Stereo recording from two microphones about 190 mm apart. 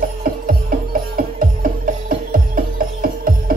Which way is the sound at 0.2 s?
45° right (ahead or behind).